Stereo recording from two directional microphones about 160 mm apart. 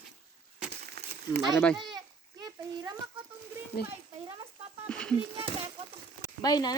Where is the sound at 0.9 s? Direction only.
90° right.